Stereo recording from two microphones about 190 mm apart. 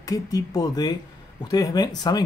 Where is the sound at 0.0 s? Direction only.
20° left (ahead or behind).